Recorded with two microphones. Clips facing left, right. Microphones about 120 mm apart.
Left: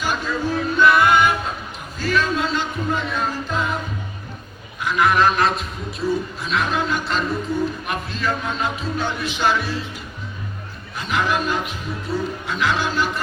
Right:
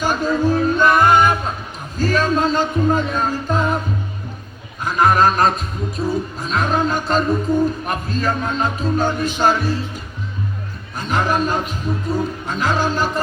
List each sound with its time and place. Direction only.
0.0 s music: 40° right (ahead or behind)
4.8 s a sound: 40° right (ahead or behind)
6.0 s a man's voice: 40° right (ahead or behind)
10.9 s a man's voice: 40° right (ahead or behind)